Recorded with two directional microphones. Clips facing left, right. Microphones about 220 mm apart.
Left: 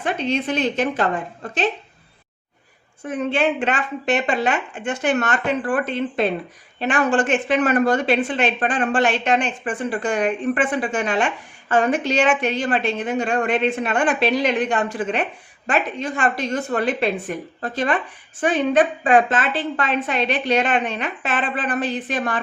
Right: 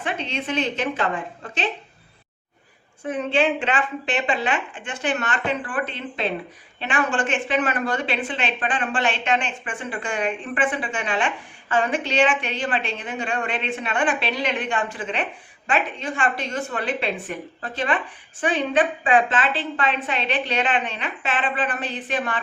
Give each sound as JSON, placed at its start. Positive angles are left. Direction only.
{"t": 0.0, "sound": "a woman's voice", "side_deg": 40}
{"t": 3.1, "sound": "a woman's voice", "side_deg": 45}